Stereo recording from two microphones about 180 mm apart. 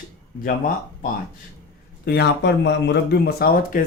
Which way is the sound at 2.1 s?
70° left (ahead or behind).